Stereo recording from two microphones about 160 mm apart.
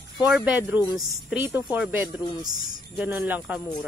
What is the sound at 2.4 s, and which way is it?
Speech, 25° right (ahead or behind).